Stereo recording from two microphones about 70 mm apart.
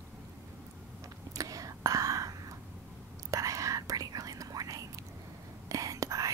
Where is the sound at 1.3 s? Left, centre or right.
Right.